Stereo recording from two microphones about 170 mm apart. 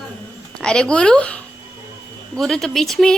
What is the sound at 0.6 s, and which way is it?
Speech, 5° left (ahead or behind).